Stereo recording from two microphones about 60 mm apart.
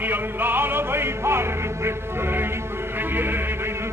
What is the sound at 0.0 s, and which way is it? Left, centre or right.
Music, right.